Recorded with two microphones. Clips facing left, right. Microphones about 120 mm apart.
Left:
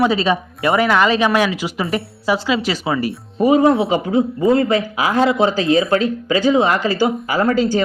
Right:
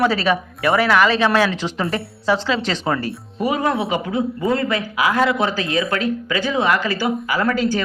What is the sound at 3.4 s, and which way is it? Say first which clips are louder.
A man's voice: left 7 dB; 30° left (ahead or behind).